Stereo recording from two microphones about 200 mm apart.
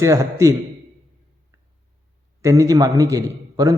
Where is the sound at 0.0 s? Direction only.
15° right (ahead or behind).